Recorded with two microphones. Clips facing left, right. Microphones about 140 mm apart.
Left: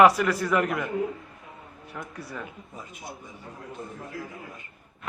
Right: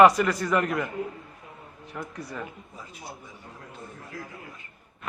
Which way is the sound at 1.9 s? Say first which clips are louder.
Right 1 dB; centre (ahead or behind).